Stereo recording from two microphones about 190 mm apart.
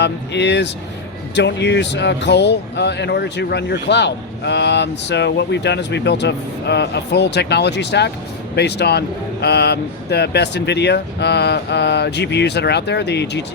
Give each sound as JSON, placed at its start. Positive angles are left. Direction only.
{"t": 0.0, "sound": "speech", "side_deg": 65}